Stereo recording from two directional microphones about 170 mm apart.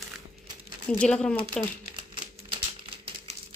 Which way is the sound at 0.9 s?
5° left (ahead or behind).